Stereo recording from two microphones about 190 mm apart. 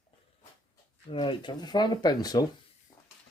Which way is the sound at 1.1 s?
25° left (ahead or behind).